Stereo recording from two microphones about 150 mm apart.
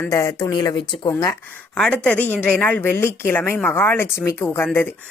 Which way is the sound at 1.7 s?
5° left (ahead or behind).